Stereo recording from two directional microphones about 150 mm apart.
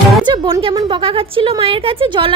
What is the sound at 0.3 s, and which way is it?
A woman's voice, 30° right (ahead or behind).